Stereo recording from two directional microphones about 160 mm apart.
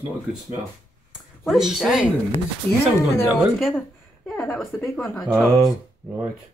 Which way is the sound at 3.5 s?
Centre (ahead or behind).